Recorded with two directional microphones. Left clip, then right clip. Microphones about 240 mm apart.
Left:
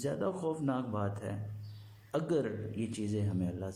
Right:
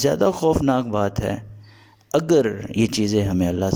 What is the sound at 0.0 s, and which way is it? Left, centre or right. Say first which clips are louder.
Speech: right 17 dB; right.